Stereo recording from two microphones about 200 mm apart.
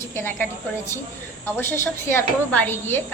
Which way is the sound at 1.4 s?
10° left (ahead or behind).